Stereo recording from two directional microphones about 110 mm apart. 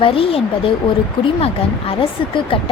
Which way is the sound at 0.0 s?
55° left (ahead or behind).